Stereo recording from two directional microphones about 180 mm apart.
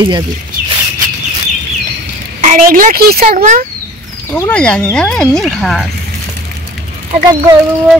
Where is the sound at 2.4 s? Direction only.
45° right (ahead or behind).